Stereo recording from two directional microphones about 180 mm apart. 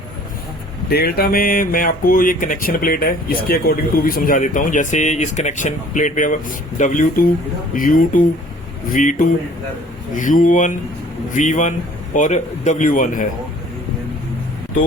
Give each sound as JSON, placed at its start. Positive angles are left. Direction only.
{"t": 0.9, "sound": "speech", "side_deg": 60}